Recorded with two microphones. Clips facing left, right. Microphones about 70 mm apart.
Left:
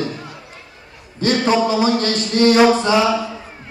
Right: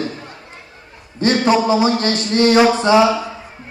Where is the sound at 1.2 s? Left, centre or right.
Right.